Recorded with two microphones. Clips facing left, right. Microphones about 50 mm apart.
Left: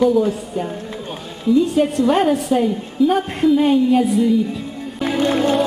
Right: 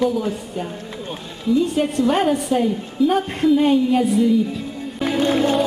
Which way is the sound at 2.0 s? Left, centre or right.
Centre.